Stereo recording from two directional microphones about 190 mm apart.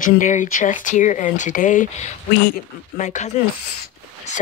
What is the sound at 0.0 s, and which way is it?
Speech, 40° left (ahead or behind).